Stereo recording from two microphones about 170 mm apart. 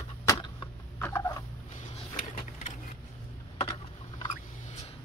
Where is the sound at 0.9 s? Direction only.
15° left (ahead or behind).